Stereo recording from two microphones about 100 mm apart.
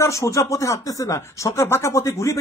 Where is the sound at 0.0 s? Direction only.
30° left (ahead or behind).